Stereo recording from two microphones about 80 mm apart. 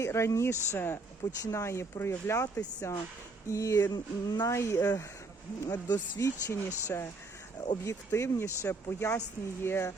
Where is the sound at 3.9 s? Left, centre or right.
Left.